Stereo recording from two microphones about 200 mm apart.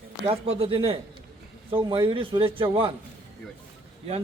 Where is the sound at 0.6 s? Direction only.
30° right (ahead or behind).